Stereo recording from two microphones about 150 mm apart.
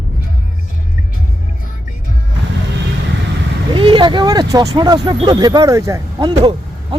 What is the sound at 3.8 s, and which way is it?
Speech, 35° right (ahead or behind).